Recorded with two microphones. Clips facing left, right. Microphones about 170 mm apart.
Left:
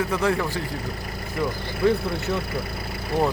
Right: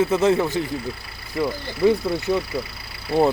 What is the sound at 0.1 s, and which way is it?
Speech, 20° right (ahead or behind).